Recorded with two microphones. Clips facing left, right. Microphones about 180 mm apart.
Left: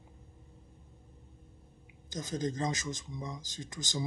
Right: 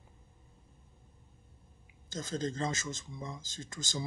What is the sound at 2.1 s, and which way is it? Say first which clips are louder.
Speech: left 1 dB; 15° left (ahead or behind).